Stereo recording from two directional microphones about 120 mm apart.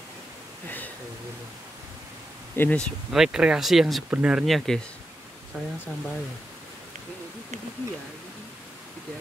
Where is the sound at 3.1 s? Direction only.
5° right (ahead or behind).